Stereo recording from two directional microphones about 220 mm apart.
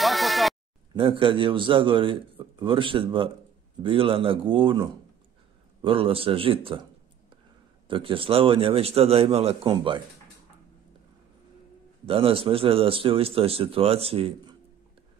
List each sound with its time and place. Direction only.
0.0 s a sound: centre (ahead or behind)
0.9 s a man's voice: 25° right (ahead or behind)
7.9 s a man's voice: 25° right (ahead or behind)
12.1 s a man's voice: 25° right (ahead or behind)